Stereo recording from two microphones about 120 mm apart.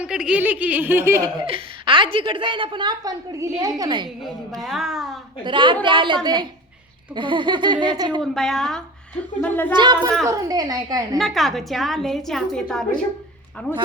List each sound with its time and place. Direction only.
0.0 s speech: 10° right (ahead or behind)
1.5 s a woman's voice: 45° right (ahead or behind)
4.6 s a woman's voice: centre (ahead or behind)
5.5 s a woman's voice: 40° right (ahead or behind)
8.2 s a woman's voice: centre (ahead or behind)
9.7 s speech: 40° right (ahead or behind)
11.2 s a woman's voice: centre (ahead or behind)
13.7 s speech: 20° left (ahead or behind)